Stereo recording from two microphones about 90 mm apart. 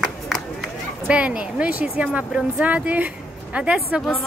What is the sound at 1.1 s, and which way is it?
A woman's voice, 10° right (ahead or behind).